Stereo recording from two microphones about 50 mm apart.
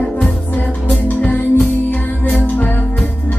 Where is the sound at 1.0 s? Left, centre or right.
Left.